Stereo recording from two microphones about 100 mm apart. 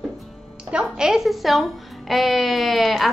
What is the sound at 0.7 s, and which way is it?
Speech, 5° right (ahead or behind).